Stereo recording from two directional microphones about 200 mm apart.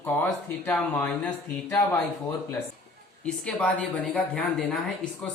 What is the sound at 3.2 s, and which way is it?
A man's voice, 5° left (ahead or behind).